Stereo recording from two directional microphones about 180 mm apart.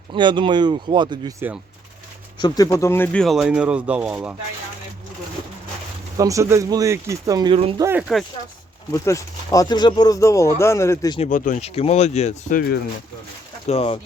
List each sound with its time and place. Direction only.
0.1 s speech: 25° right (ahead or behind)
2.4 s speech: 20° left (ahead or behind); by 4.4 s 5° right (ahead or behind)
6.1 s speech: 20° right (ahead or behind)
7.8 s speech: 15° right (ahead or behind)
8.9 s a man's voice: 20° left (ahead or behind)
11.2 s speech: 45° left (ahead or behind)
13.7 s speech: 35° left (ahead or behind)